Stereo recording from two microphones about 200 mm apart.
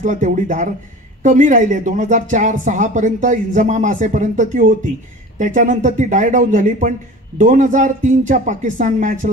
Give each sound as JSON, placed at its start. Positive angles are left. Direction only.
{"t": 0.0, "sound": "a woman's voice", "side_deg": -40}